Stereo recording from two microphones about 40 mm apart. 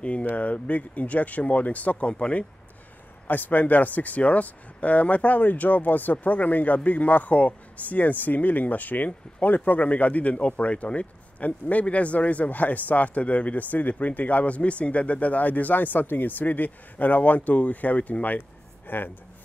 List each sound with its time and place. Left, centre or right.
0.0 s a sound: left
0.4 s speech: left
3.3 s speech: left
18.9 s speech: left